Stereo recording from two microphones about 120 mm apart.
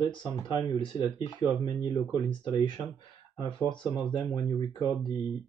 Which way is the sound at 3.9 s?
35° left (ahead or behind).